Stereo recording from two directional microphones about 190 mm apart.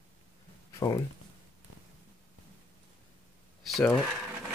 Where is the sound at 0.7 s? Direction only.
20° left (ahead or behind).